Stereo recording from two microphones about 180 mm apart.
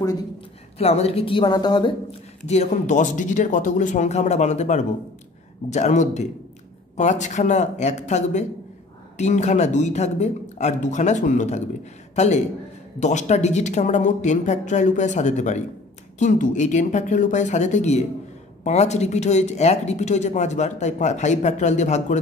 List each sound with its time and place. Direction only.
0.7 s a woman's voice: 35° left (ahead or behind)
2.4 s speech: 40° left (ahead or behind)
13.0 s speech: 40° left (ahead or behind)